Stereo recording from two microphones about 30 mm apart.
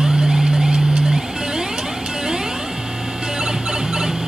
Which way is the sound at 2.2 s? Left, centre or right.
Right.